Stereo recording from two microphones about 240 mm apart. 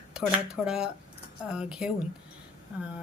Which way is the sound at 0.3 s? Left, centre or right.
Centre.